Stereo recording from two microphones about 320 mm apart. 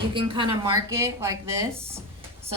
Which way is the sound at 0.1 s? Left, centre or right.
Centre.